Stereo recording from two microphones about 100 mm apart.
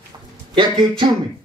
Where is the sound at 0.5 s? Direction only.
50° right (ahead or behind).